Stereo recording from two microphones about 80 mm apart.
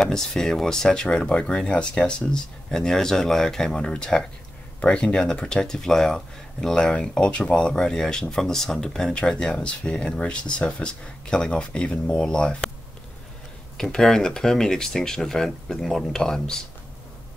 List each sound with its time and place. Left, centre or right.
0.0 s speech: centre
13.7 s speech: centre